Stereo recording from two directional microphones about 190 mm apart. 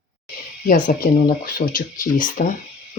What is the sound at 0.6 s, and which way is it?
Speech, 50° left (ahead or behind).